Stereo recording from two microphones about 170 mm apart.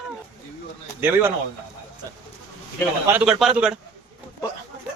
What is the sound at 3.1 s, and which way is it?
Speech, 5° right (ahead or behind).